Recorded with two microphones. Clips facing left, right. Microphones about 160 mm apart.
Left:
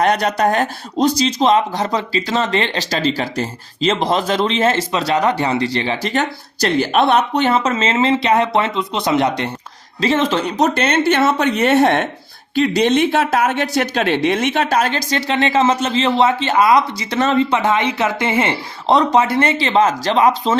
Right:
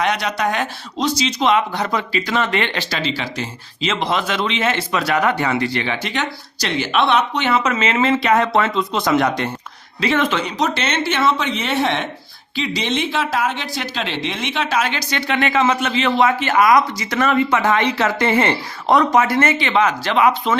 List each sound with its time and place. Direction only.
0.0 s speech: 45° left (ahead or behind)
10.4 s speech: 40° left (ahead or behind)
15.3 s speech: 30° left (ahead or behind)